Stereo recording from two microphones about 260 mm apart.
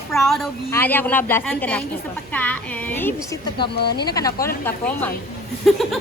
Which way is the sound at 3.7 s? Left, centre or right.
Left.